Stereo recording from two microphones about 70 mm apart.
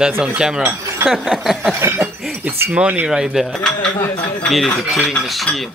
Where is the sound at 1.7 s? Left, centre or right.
Right.